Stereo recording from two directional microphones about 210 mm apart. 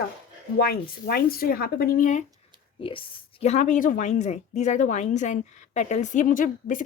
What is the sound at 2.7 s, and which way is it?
A woman's voice, 25° left (ahead or behind).